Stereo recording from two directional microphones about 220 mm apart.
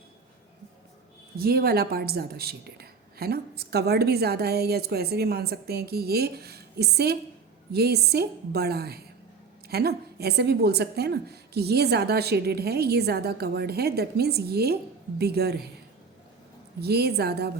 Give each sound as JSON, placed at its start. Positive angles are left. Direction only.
{"t": 1.4, "sound": "a woman's voice", "side_deg": -45}
{"t": 16.8, "sound": "a woman's voice", "side_deg": -45}